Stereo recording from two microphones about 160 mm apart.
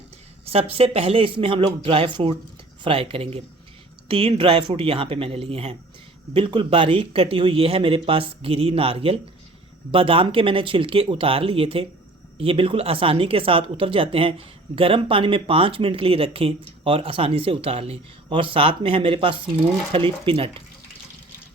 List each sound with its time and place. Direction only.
0.4 s speech: 40° right (ahead or behind)